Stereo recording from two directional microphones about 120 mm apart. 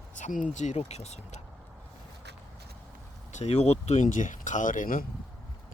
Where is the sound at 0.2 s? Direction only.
90° left.